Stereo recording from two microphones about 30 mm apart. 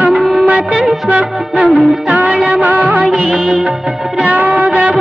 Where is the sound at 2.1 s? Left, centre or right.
Right.